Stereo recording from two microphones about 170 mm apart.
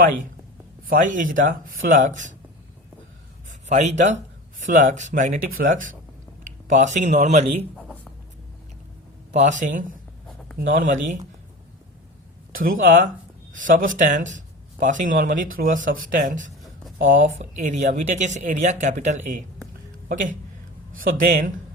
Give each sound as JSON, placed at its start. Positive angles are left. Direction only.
{"t": 0.9, "sound": "speech", "side_deg": -50}
{"t": 3.7, "sound": "speech", "side_deg": -40}
{"t": 9.3, "sound": "speech", "side_deg": -45}
{"t": 12.5, "sound": "speech", "side_deg": -55}
{"t": 21.0, "sound": "speech", "side_deg": -55}